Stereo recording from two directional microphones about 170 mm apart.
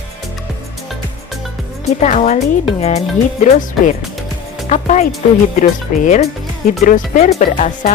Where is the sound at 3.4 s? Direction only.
45° left (ahead or behind).